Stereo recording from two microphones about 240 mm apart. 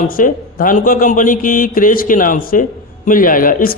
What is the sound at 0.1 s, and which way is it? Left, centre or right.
Speech, left.